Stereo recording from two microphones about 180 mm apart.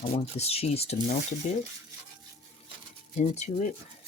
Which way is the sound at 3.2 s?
40° left (ahead or behind).